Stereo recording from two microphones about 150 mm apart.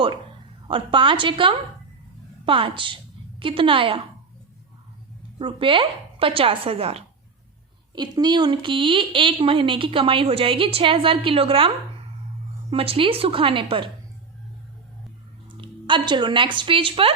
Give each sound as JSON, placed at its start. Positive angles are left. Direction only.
{"t": 0.7, "sound": "a woman's voice", "side_deg": -35}
{"t": 5.4, "sound": "a woman's voice", "side_deg": -35}
{"t": 7.9, "sound": "a woman's voice", "side_deg": -30}
{"t": 12.7, "sound": "a woman's voice", "side_deg": -40}
{"t": 15.4, "sound": "a woman's voice", "side_deg": -35}